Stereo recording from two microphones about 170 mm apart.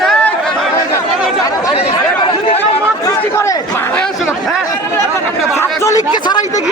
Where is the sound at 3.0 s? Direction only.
15° left (ahead or behind).